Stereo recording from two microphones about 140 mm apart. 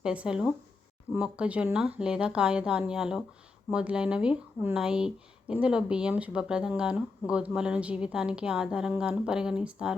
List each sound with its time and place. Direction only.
0.0 s speech: 5° right (ahead or behind)